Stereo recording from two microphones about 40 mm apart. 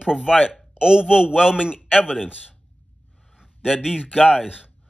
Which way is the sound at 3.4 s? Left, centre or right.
Centre.